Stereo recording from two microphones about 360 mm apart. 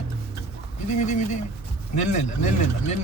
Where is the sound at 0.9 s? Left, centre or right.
Centre.